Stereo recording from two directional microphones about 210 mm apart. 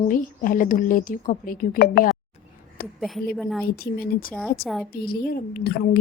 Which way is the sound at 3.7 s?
45° left (ahead or behind).